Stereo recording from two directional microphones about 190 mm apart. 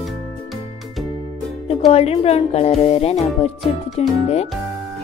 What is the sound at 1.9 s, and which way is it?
Music, 30° left (ahead or behind).